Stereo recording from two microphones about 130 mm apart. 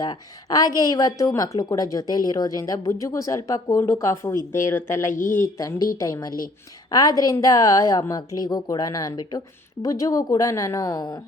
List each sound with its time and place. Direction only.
0.0 s a woman's voice: 30° left (ahead or behind)
5.1 s speech: 90° left
5.4 s a woman's voice: 25° left (ahead or behind)